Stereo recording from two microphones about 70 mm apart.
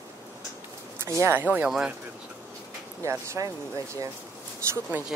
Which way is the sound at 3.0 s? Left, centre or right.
Right.